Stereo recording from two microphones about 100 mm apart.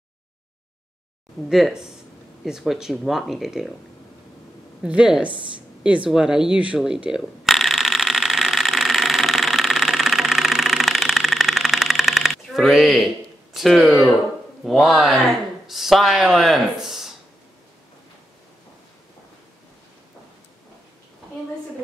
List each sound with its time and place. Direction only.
1.5 s speech: 5° right (ahead or behind)
4.8 s speech: 10° right (ahead or behind)
5.3 s a woman's voice: 60° right (ahead or behind)
5.9 s a sound: 5° right (ahead or behind)
13.5 s speech: centre (ahead or behind)